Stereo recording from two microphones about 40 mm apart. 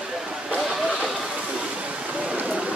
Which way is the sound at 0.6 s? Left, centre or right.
Centre.